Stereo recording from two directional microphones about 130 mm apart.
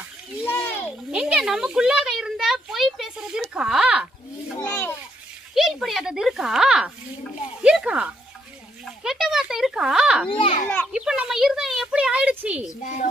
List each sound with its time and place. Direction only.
0.5 s a sound: 15° left (ahead or behind)
1.1 s a child's voice: 5° right (ahead or behind)
4.6 s a child's voice: 15° left (ahead or behind)
5.5 s a child's voice: centre (ahead or behind)
9.0 s a sound: 5° right (ahead or behind)
10.3 s a child's voice: 45° left (ahead or behind)
10.9 s a woman's voice: 5° right (ahead or behind)
12.8 s a woman's voice: 80° left